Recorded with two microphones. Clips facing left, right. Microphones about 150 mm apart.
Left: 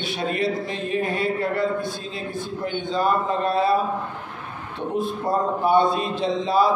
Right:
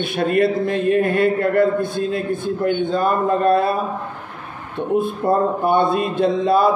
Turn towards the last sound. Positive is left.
turn(degrees=-55)  # may be behind; listen again after turning